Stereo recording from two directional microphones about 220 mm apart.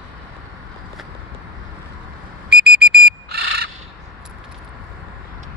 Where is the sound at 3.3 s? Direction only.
50° right (ahead or behind).